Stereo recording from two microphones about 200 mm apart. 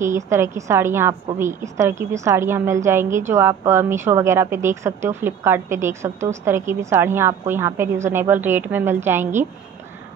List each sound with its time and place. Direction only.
0.0 s a woman's voice: 15° right (ahead or behind)